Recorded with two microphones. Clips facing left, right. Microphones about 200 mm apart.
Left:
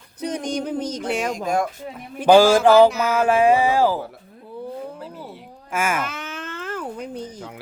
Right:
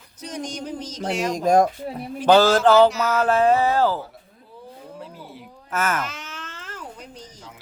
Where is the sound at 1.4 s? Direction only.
40° right (ahead or behind).